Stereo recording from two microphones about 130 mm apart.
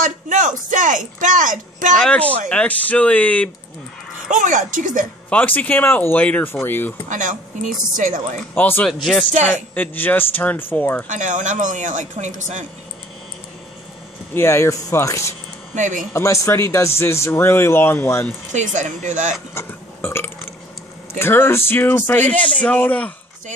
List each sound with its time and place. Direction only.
0.0 s a woman's voice: 80° right
2.0 s speech: 10° left (ahead or behind)
4.3 s a woman's voice: 80° right
5.3 s speech: 10° left (ahead or behind)
7.1 s a woman's voice: 75° right (ahead or behind)
8.5 s speech: 15° left (ahead or behind)
8.8 s speech: 5° left (ahead or behind)
11.1 s speech: 75° right (ahead or behind)
14.3 s speech: 20° left (ahead or behind)
15.7 s speech: 75° right (ahead or behind)
16.1 s speech: 20° left (ahead or behind)
18.5 s speech: 70° right (ahead or behind)
19.5 s speech: 20° left (ahead or behind)